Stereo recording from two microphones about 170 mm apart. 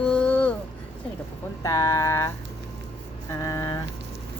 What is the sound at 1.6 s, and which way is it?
Speech, 20° left (ahead or behind).